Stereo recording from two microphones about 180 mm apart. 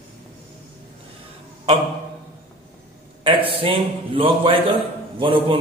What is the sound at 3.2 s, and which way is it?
A man's voice, 30° right (ahead or behind).